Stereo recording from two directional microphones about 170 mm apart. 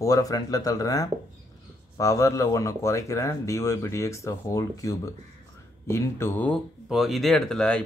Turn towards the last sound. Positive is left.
turn(degrees=5)  # may be behind; listen again after turning